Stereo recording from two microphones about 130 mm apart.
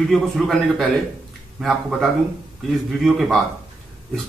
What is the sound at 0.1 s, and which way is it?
Speech, centre (ahead or behind).